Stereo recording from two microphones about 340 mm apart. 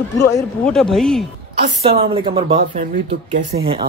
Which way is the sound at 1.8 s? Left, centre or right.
Centre.